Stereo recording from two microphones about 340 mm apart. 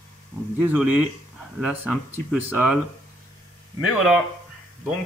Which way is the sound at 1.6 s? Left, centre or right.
Centre.